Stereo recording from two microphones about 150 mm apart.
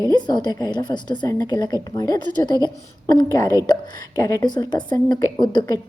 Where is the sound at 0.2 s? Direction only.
30° left (ahead or behind).